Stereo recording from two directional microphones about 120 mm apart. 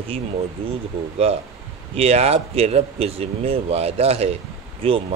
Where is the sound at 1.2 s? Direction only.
55° right (ahead or behind).